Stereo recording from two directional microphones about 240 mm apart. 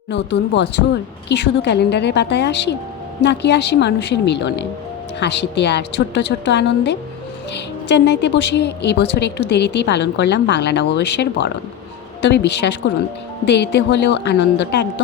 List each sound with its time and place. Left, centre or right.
0.1 s speech: left